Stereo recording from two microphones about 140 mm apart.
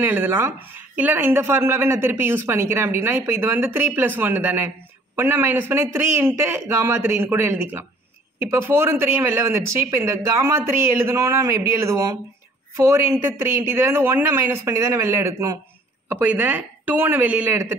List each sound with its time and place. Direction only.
0.0 s a man's voice: 15° right (ahead or behind)